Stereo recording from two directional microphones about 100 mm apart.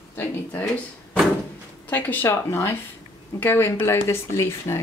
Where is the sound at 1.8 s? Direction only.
15° left (ahead or behind).